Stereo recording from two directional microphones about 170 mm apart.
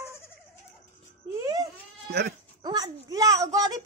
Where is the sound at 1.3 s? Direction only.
20° right (ahead or behind).